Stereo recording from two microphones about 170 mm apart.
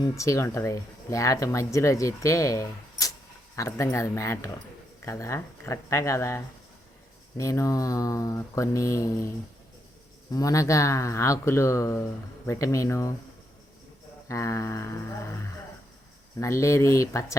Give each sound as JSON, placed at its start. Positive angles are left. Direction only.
{"t": 0.0, "sound": "speech", "side_deg": 20}
{"t": 10.3, "sound": "speech", "side_deg": 20}
{"t": 14.3, "sound": "speech", "side_deg": 20}
{"t": 16.4, "sound": "speech", "side_deg": 15}